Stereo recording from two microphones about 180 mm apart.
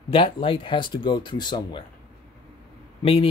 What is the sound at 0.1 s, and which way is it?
Speech, 30° left (ahead or behind).